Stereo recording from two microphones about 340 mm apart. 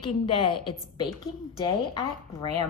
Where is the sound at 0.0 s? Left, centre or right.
Centre.